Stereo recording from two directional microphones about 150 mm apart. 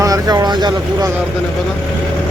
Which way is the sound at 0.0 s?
25° right (ahead or behind).